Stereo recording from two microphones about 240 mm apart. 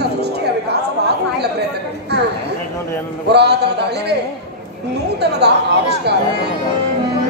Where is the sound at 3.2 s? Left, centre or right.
Right.